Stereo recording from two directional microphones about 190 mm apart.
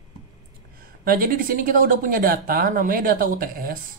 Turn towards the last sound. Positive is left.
turn(degrees=-50)  # may be behind; listen again after turning